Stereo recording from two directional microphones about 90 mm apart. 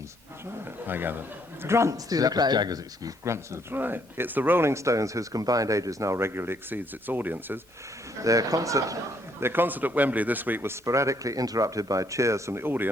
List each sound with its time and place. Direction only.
0.6 s speech: 20° right (ahead or behind)
8.2 s speech: 40° right (ahead or behind)
9.4 s speech: 25° right (ahead or behind)